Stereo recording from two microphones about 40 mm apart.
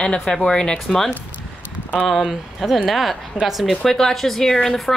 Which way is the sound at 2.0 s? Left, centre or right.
Centre.